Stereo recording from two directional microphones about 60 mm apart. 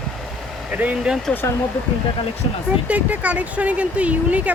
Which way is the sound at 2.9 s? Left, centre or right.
Right.